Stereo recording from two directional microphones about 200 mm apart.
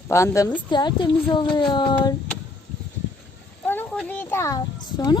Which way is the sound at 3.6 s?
10° left (ahead or behind).